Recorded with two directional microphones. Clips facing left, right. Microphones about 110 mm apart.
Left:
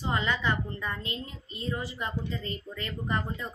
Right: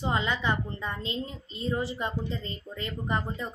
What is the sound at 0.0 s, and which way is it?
A woman's voice, 20° right (ahead or behind).